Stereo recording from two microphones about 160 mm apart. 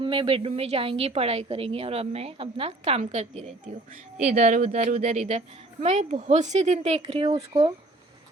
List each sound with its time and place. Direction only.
0.0 s a woman's voice: 35° right (ahead or behind)